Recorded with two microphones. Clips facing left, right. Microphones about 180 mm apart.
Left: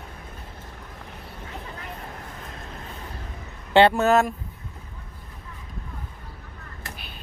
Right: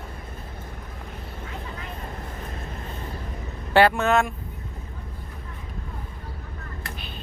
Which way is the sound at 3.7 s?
25° left (ahead or behind).